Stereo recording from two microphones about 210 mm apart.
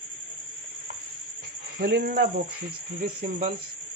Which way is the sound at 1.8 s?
50° right (ahead or behind).